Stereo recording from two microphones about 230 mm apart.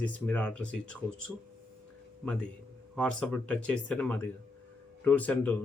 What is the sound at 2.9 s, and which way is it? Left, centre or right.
Speech, centre.